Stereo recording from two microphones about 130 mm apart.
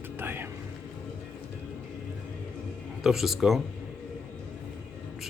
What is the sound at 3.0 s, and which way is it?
Speech, centre (ahead or behind).